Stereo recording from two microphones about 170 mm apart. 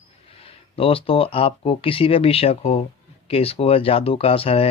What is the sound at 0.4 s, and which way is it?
Speech, 35° left (ahead or behind).